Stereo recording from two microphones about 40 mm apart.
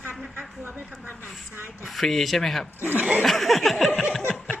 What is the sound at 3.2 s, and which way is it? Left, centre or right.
Speech, centre.